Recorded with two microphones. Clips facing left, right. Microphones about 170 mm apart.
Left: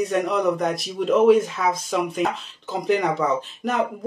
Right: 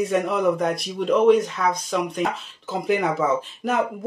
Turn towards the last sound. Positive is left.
turn(degrees=0)  # may be behind; listen again after turning